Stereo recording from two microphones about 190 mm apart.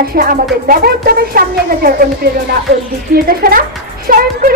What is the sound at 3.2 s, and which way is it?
A woman's voice, 50° right (ahead or behind).